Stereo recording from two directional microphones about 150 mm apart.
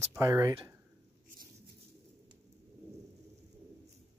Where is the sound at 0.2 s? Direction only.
20° right (ahead or behind).